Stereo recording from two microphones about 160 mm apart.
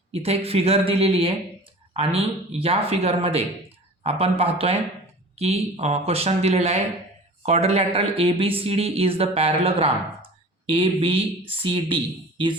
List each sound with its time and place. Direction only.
0.1 s speech: 40° right (ahead or behind)